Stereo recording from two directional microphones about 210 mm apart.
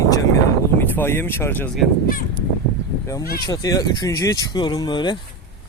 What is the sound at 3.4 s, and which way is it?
Speech, 15° left (ahead or behind).